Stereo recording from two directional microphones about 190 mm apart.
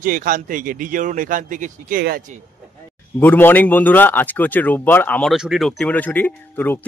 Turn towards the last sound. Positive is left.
turn(degrees=10)  # may be behind; listen again after turning